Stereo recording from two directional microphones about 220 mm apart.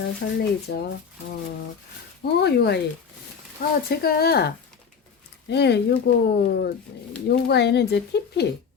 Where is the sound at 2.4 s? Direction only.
50° left (ahead or behind).